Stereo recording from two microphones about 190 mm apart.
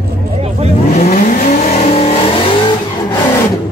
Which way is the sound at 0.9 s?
40° left (ahead or behind).